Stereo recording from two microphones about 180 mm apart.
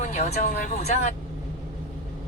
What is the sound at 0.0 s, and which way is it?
Speech, 40° left (ahead or behind).